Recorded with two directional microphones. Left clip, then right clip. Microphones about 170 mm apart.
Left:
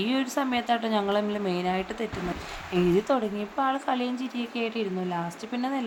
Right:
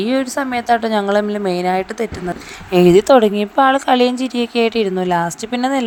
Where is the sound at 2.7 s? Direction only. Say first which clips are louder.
Right 15 dB; 55° right (ahead or behind).